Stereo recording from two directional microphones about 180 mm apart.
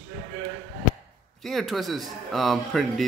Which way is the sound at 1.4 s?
Centre (ahead or behind).